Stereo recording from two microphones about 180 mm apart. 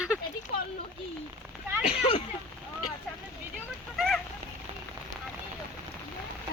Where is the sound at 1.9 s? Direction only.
35° left (ahead or behind).